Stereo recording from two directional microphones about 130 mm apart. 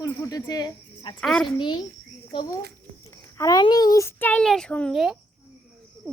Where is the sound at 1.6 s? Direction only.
35° left (ahead or behind).